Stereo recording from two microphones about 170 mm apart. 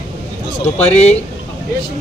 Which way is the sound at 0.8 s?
40° left (ahead or behind).